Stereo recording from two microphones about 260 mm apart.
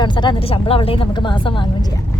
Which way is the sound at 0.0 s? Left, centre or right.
Centre.